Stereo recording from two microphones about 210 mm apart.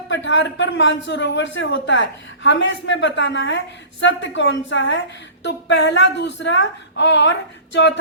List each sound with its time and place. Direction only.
0.1 s a man's voice: 60° left (ahead or behind)